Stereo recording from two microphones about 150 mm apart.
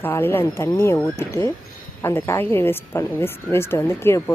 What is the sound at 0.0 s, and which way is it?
Speech, 15° left (ahead or behind).